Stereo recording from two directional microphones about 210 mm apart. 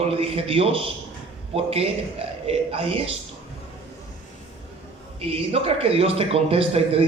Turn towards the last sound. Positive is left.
turn(degrees=-25)  # may be behind; listen again after turning